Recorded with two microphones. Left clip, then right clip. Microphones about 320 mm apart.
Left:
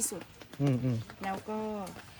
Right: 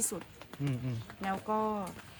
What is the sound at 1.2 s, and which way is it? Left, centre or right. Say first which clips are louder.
Speech: right 4 dB; centre.